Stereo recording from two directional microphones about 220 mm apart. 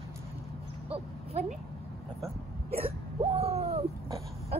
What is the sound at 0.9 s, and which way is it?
Speech, 30° right (ahead or behind).